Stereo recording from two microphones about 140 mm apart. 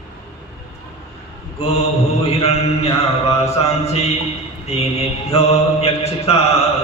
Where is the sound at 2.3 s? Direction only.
45° left (ahead or behind).